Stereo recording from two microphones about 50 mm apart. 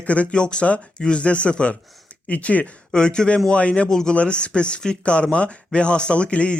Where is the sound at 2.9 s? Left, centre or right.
Centre.